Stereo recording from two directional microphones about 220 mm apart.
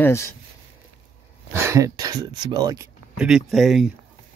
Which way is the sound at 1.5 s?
10° right (ahead or behind).